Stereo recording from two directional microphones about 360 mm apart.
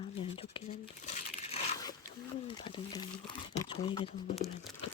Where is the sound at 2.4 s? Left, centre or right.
Centre.